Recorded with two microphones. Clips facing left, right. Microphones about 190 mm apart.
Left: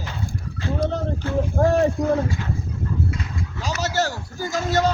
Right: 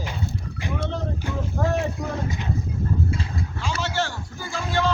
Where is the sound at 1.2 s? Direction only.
15° right (ahead or behind).